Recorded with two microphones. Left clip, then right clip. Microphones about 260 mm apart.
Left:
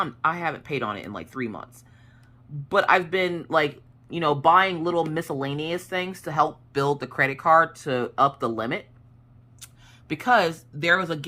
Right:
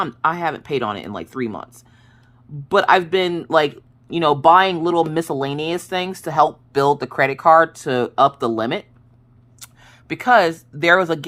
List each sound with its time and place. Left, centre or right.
0.0 s speech: right
9.6 s speech: centre